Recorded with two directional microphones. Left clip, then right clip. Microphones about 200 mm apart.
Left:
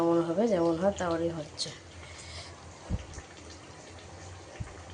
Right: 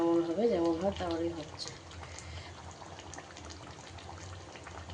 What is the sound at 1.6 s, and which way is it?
Speech, 25° left (ahead or behind).